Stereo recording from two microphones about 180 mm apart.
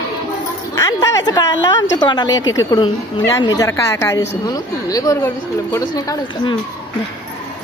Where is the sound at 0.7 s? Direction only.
20° left (ahead or behind).